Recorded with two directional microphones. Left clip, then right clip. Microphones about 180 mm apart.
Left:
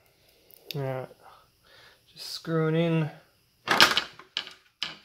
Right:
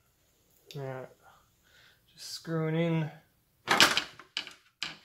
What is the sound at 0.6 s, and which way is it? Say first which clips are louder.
Speech: left 7 dB; 50° left (ahead or behind).